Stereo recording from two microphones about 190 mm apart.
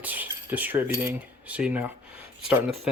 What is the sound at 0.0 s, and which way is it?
Cutlery, 10° right (ahead or behind).